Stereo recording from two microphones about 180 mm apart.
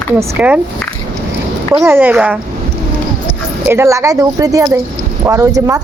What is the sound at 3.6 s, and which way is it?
Speech, 15° right (ahead or behind).